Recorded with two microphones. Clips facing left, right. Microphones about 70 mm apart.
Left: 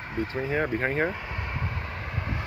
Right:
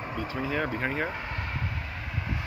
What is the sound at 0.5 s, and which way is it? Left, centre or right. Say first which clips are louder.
Speech: left 2 dB; left.